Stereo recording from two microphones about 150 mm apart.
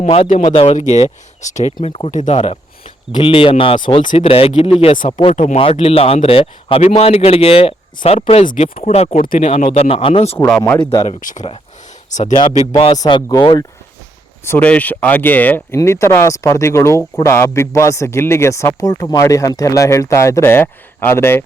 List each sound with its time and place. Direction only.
0.0 s speech: 45° left (ahead or behind)
0.8 s speech: 50° left (ahead or behind)
2.0 s speech: 55° left (ahead or behind)
2.5 s speech: 35° left (ahead or behind)
5.0 s speech: 50° left (ahead or behind)
5.5 s speech: 40° left (ahead or behind)
9.4 s speech: 50° left (ahead or behind)
9.9 s speech: 35° left (ahead or behind)
10.3 s speech: 5° left (ahead or behind)
11.2 s speech: 60° left (ahead or behind)
12.9 s speech: 30° left (ahead or behind)
14.4 s a man's voice: 10° left (ahead or behind)